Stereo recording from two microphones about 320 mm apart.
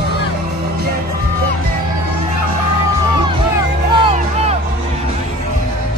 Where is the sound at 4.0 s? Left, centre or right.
Centre.